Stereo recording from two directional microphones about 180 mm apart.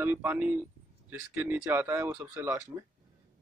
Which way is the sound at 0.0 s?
10° right (ahead or behind).